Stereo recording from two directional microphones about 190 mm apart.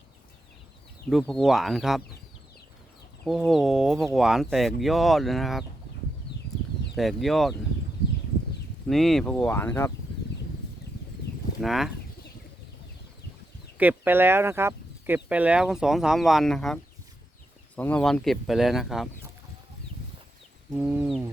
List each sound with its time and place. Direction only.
1.1 s speech: centre (ahead or behind)
3.2 s speech: centre (ahead or behind)
6.9 s speech: centre (ahead or behind)
8.9 s speech: centre (ahead or behind)
11.6 s speech: centre (ahead or behind)
13.7 s speech: 10° right (ahead or behind)
20.7 s speech: 10° right (ahead or behind)